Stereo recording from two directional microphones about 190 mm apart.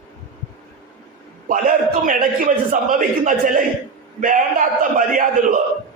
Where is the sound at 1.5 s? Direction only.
45° right (ahead or behind).